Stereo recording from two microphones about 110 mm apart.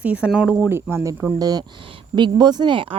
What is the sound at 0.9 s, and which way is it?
Speech, 30° right (ahead or behind).